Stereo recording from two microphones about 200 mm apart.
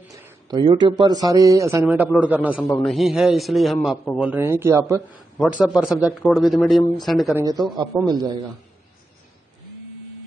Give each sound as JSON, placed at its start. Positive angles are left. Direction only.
{"t": 0.1, "sound": "speech", "side_deg": -20}
{"t": 5.4, "sound": "speech", "side_deg": -5}
{"t": 7.3, "sound": "a man's voice", "side_deg": -20}